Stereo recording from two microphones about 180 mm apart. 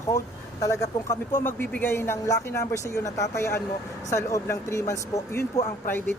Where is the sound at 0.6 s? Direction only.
20° left (ahead or behind).